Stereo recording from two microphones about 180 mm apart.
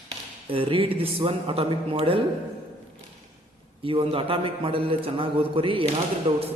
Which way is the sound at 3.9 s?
30° right (ahead or behind).